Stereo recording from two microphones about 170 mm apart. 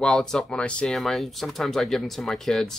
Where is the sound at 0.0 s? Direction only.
5° left (ahead or behind).